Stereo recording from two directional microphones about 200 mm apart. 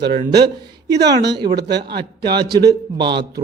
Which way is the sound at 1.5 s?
55° right (ahead or behind).